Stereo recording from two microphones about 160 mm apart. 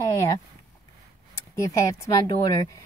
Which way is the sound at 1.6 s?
20° left (ahead or behind).